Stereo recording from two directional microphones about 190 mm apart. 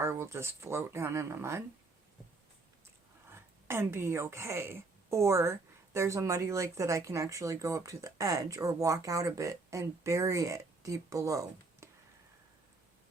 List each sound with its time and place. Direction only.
0.0 s a woman's voice: 15° right (ahead or behind)
3.3 s a woman's voice: 15° right (ahead or behind)